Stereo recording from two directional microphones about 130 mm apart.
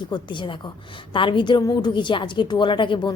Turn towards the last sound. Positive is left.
turn(degrees=40)  # may be behind; listen again after turning